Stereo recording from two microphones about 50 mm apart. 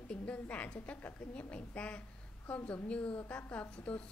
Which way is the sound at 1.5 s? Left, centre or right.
Left.